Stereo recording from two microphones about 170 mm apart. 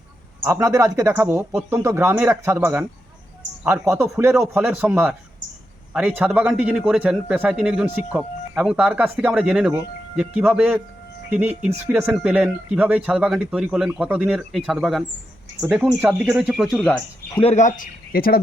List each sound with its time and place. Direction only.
0.4 s a man's voice: 15° right (ahead or behind)
17.4 s speech: 45° left (ahead or behind); by 18.4 s 60° left (ahead or behind)